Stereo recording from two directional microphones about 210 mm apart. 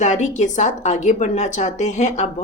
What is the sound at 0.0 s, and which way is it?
A woman's voice, 35° left (ahead or behind).